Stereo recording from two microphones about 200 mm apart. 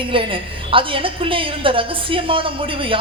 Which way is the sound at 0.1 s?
25° right (ahead or behind).